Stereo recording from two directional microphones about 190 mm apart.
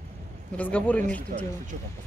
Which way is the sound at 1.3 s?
45° right (ahead or behind).